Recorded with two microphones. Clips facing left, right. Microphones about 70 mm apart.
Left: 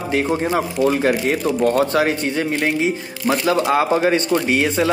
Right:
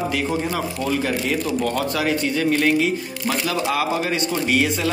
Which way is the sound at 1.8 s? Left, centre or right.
Left.